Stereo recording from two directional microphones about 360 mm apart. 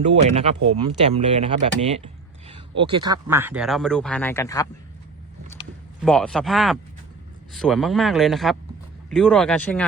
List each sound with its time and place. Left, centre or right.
0.0 s speech: centre
6.0 s speech: centre